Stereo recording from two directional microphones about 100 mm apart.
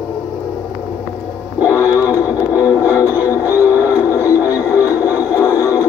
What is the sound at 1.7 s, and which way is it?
Music, 20° right (ahead or behind).